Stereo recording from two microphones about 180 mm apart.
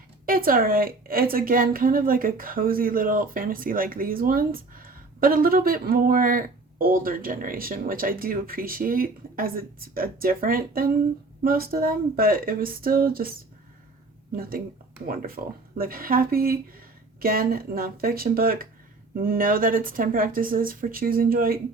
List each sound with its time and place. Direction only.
0.3 s a woman's voice: 55° right (ahead or behind)
15.0 s a woman's voice: 55° right (ahead or behind)